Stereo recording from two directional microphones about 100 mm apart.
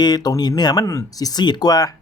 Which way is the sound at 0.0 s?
40° left (ahead or behind).